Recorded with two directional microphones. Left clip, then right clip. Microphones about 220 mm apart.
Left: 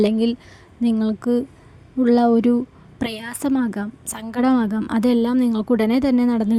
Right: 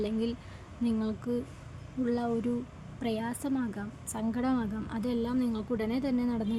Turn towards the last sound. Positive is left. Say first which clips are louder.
# left 13 dB
turn(degrees=45)  # may be behind; listen again after turning